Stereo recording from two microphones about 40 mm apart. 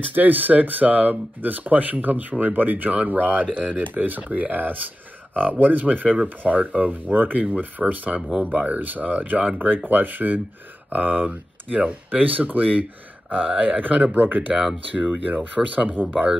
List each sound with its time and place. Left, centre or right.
0.1 s speech: right
14.5 s speech: centre
15.0 s speech: right